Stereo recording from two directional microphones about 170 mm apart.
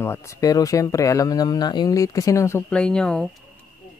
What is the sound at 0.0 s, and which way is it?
Speech, 15° left (ahead or behind).